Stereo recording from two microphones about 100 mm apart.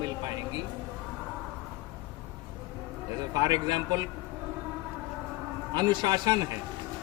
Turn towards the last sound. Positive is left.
turn(degrees=-45)  # may be behind; listen again after turning